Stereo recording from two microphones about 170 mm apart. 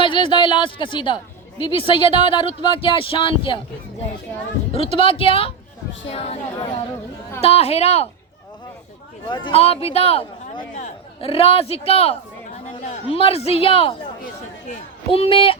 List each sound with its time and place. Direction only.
0.0 s a woman's voice: 30° left (ahead or behind)
4.7 s a man's voice: 35° left (ahead or behind)
9.3 s a man's voice: 30° left (ahead or behind)
15.1 s a man's voice: 30° left (ahead or behind)